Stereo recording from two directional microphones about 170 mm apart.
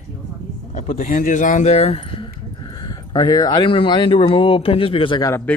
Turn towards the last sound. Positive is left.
turn(degrees=5)  # may be behind; listen again after turning